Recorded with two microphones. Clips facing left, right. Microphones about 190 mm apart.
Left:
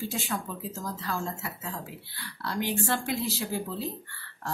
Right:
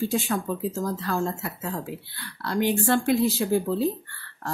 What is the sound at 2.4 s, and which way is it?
Speech, 55° right (ahead or behind).